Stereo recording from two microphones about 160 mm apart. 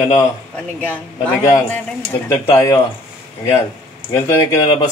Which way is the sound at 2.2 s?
20° left (ahead or behind).